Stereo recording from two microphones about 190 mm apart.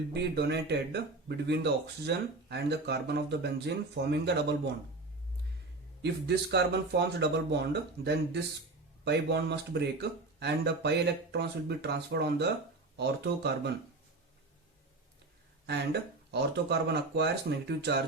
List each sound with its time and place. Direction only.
0.1 s speech: 60° right (ahead or behind)
6.0 s speech: 60° right (ahead or behind)
15.6 s speech: 60° right (ahead or behind)